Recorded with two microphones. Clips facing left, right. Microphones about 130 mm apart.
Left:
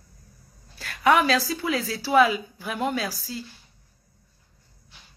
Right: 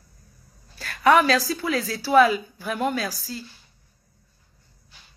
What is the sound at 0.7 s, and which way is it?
A woman's voice, 15° left (ahead or behind).